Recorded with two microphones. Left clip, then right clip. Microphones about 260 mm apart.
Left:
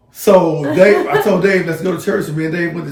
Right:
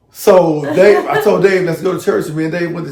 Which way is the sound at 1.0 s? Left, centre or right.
Centre.